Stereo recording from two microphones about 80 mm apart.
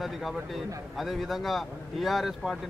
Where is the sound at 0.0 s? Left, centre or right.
Centre.